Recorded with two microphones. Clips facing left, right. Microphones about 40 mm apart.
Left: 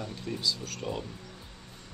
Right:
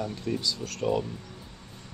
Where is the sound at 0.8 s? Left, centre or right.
Centre.